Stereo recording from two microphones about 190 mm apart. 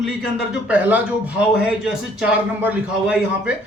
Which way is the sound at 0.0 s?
5° right (ahead or behind).